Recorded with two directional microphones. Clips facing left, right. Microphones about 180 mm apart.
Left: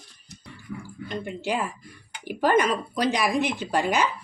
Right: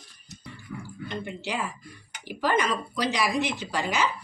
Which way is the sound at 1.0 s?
45° left (ahead or behind).